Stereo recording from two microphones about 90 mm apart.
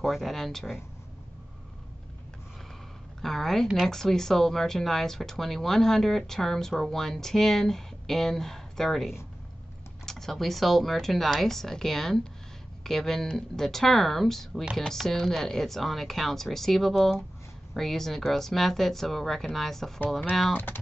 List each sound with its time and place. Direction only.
0.0 s speech: centre (ahead or behind)
3.2 s a woman's voice: 5° left (ahead or behind)
20.5 s speech: 20° left (ahead or behind)